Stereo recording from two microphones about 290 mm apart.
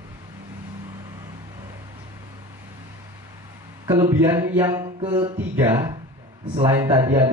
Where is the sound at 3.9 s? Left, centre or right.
Centre.